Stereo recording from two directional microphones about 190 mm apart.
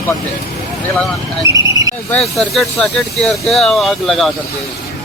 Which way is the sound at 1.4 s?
20° right (ahead or behind).